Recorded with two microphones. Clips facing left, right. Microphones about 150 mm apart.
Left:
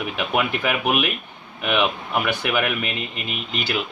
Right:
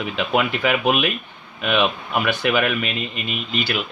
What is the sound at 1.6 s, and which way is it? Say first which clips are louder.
Speech: right 1 dB; 20° left (ahead or behind).